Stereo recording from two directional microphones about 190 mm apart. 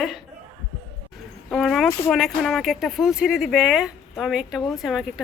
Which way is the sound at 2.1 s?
Centre (ahead or behind).